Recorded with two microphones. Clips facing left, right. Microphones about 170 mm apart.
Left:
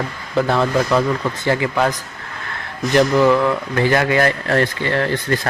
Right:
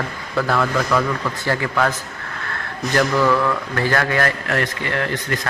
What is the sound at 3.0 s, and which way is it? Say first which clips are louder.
Speech: left 4 dB; 20° left (ahead or behind).